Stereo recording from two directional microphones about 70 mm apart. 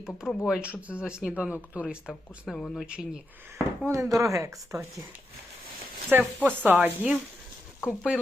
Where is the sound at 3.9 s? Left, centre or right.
Right.